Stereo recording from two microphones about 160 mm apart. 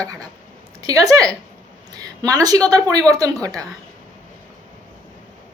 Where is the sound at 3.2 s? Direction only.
20° right (ahead or behind).